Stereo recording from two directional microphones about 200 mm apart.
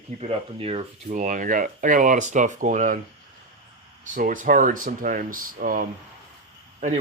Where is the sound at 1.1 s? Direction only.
40° right (ahead or behind).